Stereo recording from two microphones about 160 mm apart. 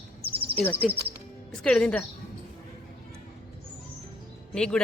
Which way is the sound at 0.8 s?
Centre (ahead or behind).